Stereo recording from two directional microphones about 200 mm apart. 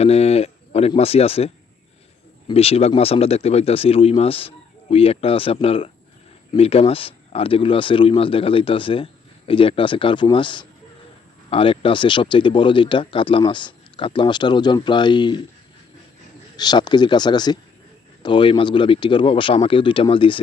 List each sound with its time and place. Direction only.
0.0 s speech: 30° left (ahead or behind)
2.5 s speech: 30° left (ahead or behind)
16.6 s speech: 20° left (ahead or behind)